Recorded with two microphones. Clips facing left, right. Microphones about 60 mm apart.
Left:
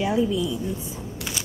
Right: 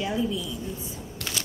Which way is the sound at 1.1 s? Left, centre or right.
Centre.